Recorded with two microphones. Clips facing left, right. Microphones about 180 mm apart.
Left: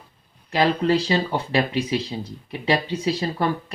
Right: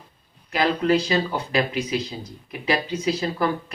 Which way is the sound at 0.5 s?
30° left (ahead or behind).